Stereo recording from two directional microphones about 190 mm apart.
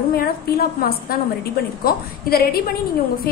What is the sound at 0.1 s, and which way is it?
A woman's voice, 55° left (ahead or behind).